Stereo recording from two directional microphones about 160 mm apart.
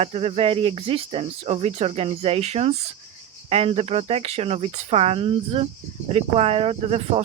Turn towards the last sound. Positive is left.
turn(degrees=-40)  # may be behind; listen again after turning